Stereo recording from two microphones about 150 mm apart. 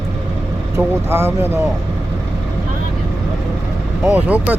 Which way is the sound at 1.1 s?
15° right (ahead or behind).